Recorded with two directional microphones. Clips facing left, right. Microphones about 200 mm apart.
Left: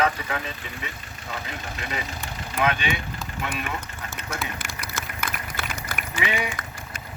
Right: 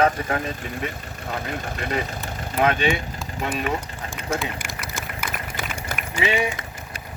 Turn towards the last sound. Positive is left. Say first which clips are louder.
# right 5 dB
turn(degrees=-25)  # may be behind; listen again after turning